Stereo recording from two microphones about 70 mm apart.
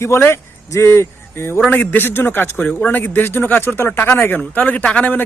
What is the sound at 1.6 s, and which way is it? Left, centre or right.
Speech, left.